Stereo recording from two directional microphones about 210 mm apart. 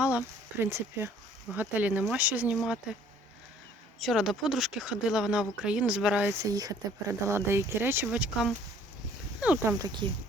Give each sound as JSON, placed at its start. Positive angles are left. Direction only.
{"t": 0.0, "sound": "speech", "side_deg": -5}
{"t": 4.0, "sound": "speech", "side_deg": 0}